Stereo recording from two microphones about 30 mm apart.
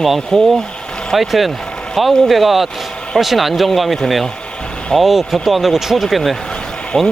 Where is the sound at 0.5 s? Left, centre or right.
Left.